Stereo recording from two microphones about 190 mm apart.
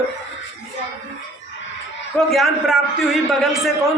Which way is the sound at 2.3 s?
Centre (ahead or behind).